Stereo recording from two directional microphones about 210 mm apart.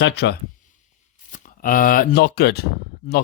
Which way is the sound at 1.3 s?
40° left (ahead or behind).